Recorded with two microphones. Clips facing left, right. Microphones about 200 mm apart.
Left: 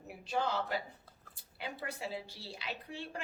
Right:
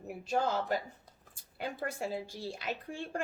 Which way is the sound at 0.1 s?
45° right (ahead or behind).